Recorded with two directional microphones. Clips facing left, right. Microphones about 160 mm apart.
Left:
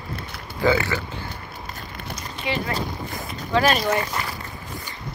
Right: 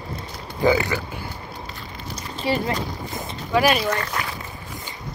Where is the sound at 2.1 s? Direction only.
35° right (ahead or behind).